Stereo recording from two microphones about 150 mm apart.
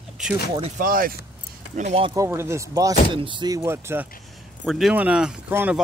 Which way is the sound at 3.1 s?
35° right (ahead or behind).